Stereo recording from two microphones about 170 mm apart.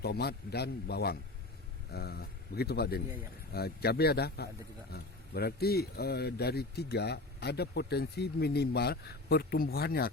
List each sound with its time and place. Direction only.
0.0 s speech: 70° left (ahead or behind)